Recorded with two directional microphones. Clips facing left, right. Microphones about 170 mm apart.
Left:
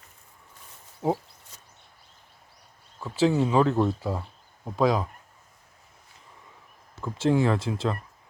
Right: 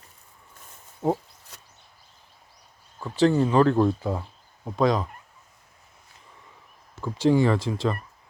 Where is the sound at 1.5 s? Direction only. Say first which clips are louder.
Right 5 dB; 65° right (ahead or behind).